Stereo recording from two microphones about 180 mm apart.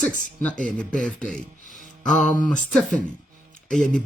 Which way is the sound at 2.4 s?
45° left (ahead or behind).